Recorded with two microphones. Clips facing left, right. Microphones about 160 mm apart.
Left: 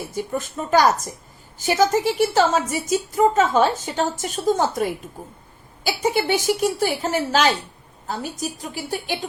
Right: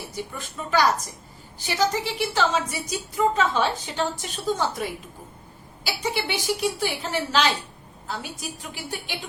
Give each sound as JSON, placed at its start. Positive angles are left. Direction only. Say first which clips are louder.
{"t": 0.1, "sound": "a woman's voice", "louder": "left 8 dB", "side_deg": 45}